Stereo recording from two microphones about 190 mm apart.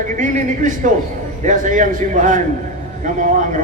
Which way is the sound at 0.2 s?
40° right (ahead or behind).